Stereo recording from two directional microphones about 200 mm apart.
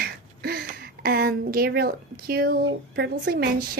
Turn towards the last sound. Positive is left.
turn(degrees=-50)  # may be behind; listen again after turning